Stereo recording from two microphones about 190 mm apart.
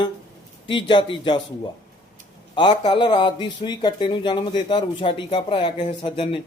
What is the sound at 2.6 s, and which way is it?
Speech, 25° left (ahead or behind).